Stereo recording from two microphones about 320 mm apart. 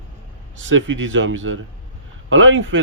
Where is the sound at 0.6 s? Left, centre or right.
Right.